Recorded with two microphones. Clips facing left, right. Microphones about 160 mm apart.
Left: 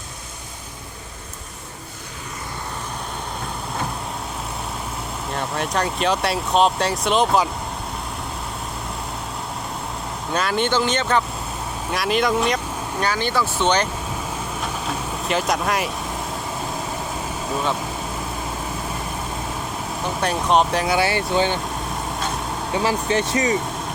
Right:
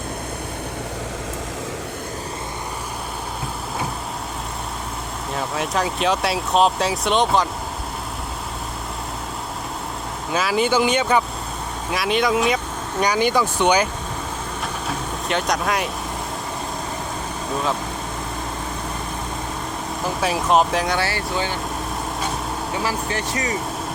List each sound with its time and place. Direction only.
5.3 s speech: centre (ahead or behind)
10.3 s speech: 5° right (ahead or behind)
13.0 s speech: 15° right (ahead or behind)
14.8 s vehicle: centre (ahead or behind)
17.5 s speech: centre (ahead or behind)
20.2 s speech: centre (ahead or behind)
21.0 s speech: 20° left (ahead or behind)
22.8 s speech: 25° left (ahead or behind)